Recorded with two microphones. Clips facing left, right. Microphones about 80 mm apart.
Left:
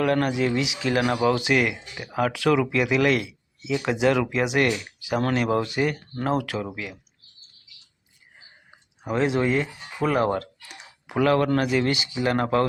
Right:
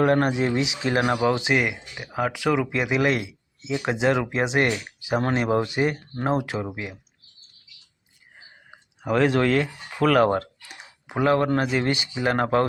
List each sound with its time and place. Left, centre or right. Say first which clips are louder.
0.0 s speech: right 2 dB; right
8.4 s a sound: right 4 dB; right
10.2 s typing: right 2 dB; right
11.1 s speech: even; right